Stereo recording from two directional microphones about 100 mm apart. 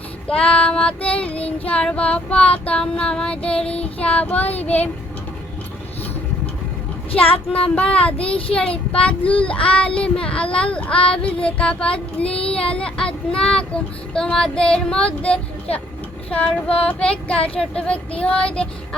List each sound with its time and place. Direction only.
0.3 s speech: 10° left (ahead or behind)
3.8 s child singing: 75° left (ahead or behind)
4.0 s speech: 15° left (ahead or behind)
7.1 s speech: 70° left (ahead or behind)
8.0 s speech: 10° left (ahead or behind)
8.9 s child singing: 10° left (ahead or behind)
9.4 s speech: 10° left (ahead or behind)
17.3 s speech: 70° left (ahead or behind)
17.6 s speech: 10° left (ahead or behind)